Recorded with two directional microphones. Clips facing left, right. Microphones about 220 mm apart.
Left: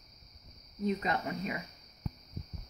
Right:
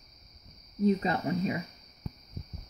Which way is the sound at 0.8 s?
30° right (ahead or behind).